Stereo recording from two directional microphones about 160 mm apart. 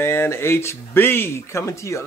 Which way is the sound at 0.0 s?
15° left (ahead or behind).